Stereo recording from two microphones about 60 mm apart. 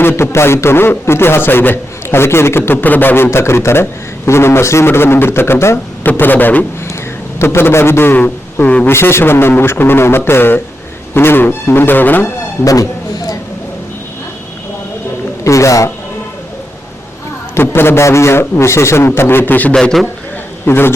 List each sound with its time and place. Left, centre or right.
0.0 s a man's voice: left
2.8 s a man's voice: left
3.2 s a man's voice: left
6.1 s a man's voice: left
7.3 s a man's voice: left
8.6 s a man's voice: left
8.9 s a man's voice: left
12.6 s speech: left
15.4 s a man's voice: left
17.5 s a man's voice: left
19.7 s a man's voice: centre
20.7 s a man's voice: left